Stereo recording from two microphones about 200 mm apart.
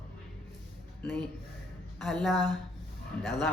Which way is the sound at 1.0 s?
10° left (ahead or behind).